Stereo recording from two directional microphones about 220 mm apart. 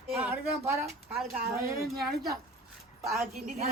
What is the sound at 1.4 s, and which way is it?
Speech, 45° right (ahead or behind).